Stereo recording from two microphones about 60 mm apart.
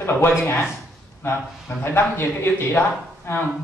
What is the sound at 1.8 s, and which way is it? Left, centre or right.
Speech, left.